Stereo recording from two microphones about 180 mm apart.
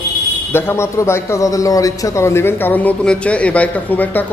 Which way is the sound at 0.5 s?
15° left (ahead or behind).